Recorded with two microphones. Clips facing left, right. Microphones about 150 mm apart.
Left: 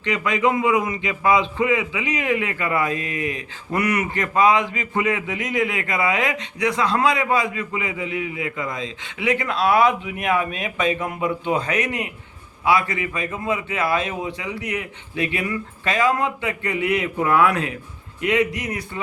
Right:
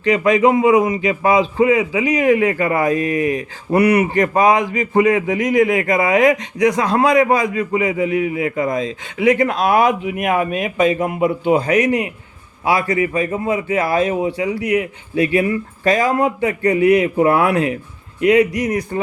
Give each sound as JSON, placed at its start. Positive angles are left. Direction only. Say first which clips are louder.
{"t": 0.1, "sound": "a man's voice", "louder": "right 7 dB", "side_deg": -35}